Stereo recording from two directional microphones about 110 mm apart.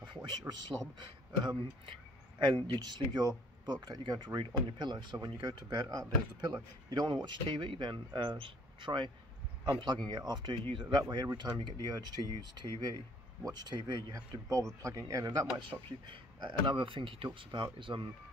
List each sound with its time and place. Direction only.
0.0 s a sound: 40° right (ahead or behind)
0.9 s speech: 40° right (ahead or behind)
16.1 s speech: 45° right (ahead or behind)